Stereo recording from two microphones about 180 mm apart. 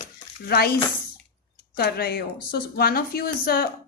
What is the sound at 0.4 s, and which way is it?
A woman's voice, 60° left (ahead or behind).